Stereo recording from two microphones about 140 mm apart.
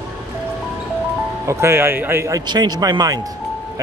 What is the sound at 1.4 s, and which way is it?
Speech, 15° right (ahead or behind).